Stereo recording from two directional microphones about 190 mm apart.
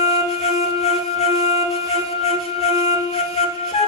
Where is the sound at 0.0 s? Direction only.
35° left (ahead or behind).